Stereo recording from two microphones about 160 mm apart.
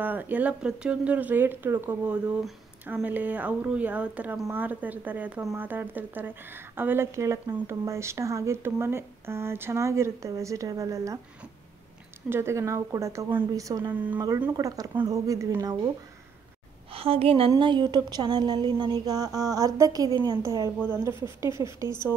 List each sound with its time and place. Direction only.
0.0 s speech: 10° right (ahead or behind)
12.3 s speech: 15° right (ahead or behind)
13.9 s speech: 10° right (ahead or behind)
14.6 s speech: 20° right (ahead or behind)
16.9 s a woman's voice: 35° right (ahead or behind); by 22.0 s 20° right (ahead or behind)